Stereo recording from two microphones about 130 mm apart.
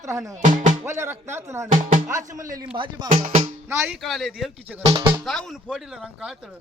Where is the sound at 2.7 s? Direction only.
40° right (ahead or behind).